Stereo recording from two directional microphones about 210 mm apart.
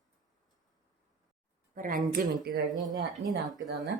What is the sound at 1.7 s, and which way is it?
Speech, 40° right (ahead or behind).